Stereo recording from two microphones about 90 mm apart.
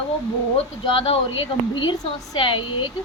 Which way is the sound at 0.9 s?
90° left.